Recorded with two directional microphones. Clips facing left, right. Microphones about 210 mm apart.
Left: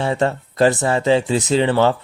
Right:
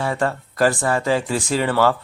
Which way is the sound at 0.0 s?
25° left (ahead or behind).